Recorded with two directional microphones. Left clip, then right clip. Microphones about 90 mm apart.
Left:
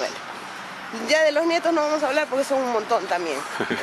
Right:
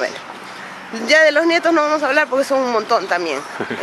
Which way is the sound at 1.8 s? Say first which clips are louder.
Right 6 dB; 35° right (ahead or behind).